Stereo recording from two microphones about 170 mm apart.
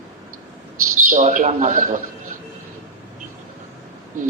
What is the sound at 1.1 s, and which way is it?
Speech, 45° right (ahead or behind).